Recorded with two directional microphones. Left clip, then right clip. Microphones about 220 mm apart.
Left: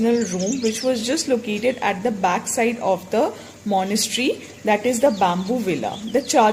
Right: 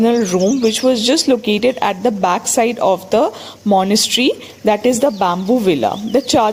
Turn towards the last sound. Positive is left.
turn(degrees=-35)  # may be behind; listen again after turning